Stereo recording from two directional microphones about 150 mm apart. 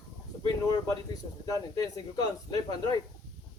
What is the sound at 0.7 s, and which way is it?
Speech, 25° left (ahead or behind).